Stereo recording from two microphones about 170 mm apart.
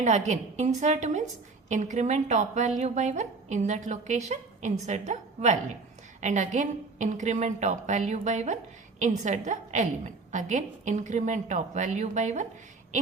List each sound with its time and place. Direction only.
0.0 s a woman's voice: 40° right (ahead or behind)